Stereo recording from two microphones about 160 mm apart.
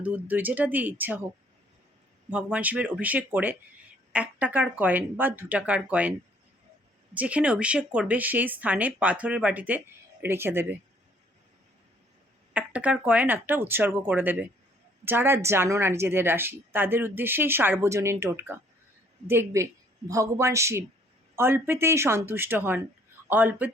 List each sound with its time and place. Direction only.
0.0 s a woman's voice: 10° right (ahead or behind)
2.3 s a woman's voice: 10° right (ahead or behind)
12.5 s a woman's voice: 10° right (ahead or behind)